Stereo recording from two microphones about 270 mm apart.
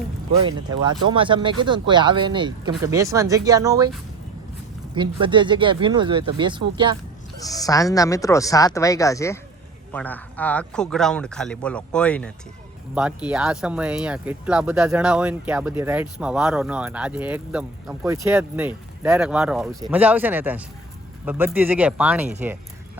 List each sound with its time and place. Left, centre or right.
0.4 s speech: centre
4.9 s speech: centre
7.4 s speech: centre